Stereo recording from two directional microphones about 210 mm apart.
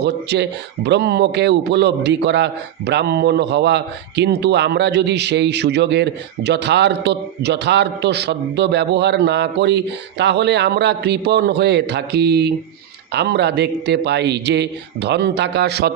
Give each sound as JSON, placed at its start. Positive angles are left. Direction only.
{"t": 0.0, "sound": "a man's voice", "side_deg": -55}